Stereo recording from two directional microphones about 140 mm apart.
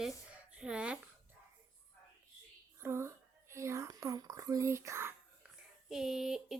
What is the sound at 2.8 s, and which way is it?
Speech, 20° right (ahead or behind).